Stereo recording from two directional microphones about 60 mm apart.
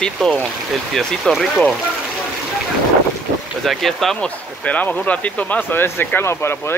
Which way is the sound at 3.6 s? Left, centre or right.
Centre.